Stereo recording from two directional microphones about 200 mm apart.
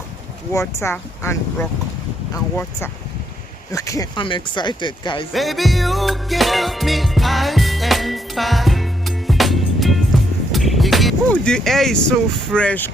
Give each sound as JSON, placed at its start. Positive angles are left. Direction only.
{"t": 0.5, "sound": "speech", "side_deg": 15}
{"t": 5.3, "sound": "music", "side_deg": 0}
{"t": 10.5, "sound": "vehicle", "side_deg": 0}